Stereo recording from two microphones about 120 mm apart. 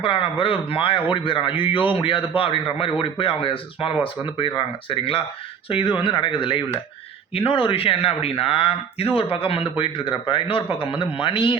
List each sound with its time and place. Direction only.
0.0 s a man's voice: 50° left (ahead or behind)